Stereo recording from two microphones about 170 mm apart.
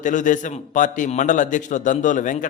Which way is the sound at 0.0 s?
50° left (ahead or behind).